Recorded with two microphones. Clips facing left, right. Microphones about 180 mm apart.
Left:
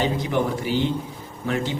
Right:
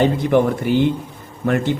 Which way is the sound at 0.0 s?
55° right (ahead or behind).